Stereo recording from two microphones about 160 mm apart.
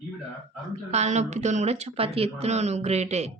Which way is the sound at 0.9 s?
45° right (ahead or behind).